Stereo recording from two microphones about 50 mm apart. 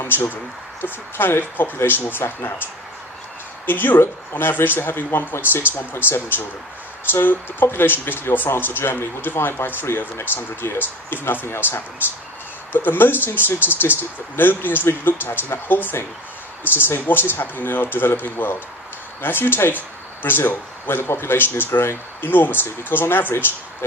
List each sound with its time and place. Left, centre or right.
0.0 s speech: left
3.7 s speech: left